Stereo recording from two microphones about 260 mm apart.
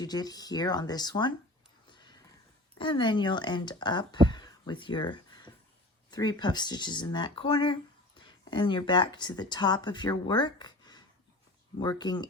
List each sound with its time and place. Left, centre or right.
0.0 s speech: centre
1.9 s a sound: centre
2.7 s speech: centre